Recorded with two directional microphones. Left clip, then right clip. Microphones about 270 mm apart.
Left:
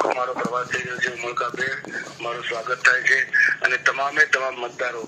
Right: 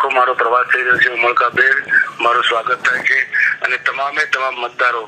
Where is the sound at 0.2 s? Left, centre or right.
Right.